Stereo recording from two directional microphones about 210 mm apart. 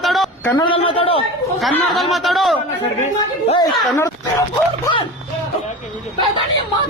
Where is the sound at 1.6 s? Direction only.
Centre (ahead or behind).